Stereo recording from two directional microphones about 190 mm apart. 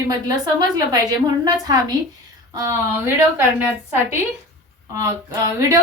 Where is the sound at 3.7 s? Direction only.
10° right (ahead or behind).